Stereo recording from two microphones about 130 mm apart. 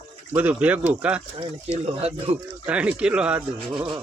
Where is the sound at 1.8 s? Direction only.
50° right (ahead or behind).